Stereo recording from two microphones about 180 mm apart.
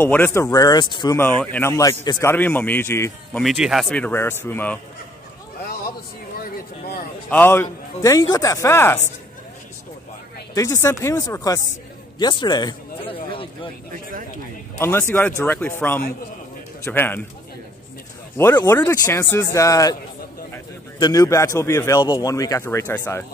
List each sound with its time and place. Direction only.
0.0 s speech: 10° left (ahead or behind)
1.1 s a man's voice: 10° left (ahead or behind)
3.4 s a man's voice: centre (ahead or behind)
7.2 s a man's voice: 10° left (ahead or behind)
10.5 s a man's voice: 15° left (ahead or behind)
14.8 s a man's voice: 15° left (ahead or behind)
16.8 s a man's voice: 10° left (ahead or behind)
18.6 s a man's voice: 15° left (ahead or behind)